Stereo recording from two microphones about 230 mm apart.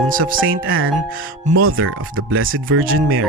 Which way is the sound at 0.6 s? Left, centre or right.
Right.